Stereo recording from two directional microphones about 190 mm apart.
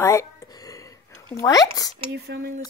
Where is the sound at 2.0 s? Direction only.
60° right (ahead or behind).